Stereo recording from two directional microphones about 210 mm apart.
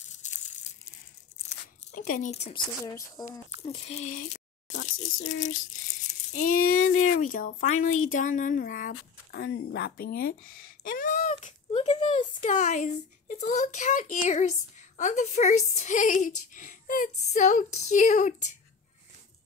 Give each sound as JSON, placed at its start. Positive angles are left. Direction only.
{"t": 1.5, "sound": "tearing", "side_deg": 35}
{"t": 2.8, "sound": "speech", "side_deg": 15}
{"t": 3.6, "sound": "speech", "side_deg": 30}
{"t": 4.9, "sound": "speech", "side_deg": 70}
{"t": 5.3, "sound": "a woman's voice", "side_deg": 35}